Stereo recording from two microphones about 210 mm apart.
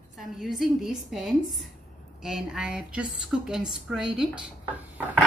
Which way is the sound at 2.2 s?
Centre (ahead or behind).